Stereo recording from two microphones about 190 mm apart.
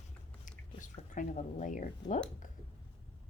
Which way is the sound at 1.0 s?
40° left (ahead or behind).